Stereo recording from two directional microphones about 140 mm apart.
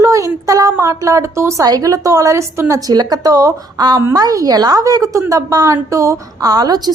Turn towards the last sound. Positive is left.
turn(degrees=-30)  # may be behind; listen again after turning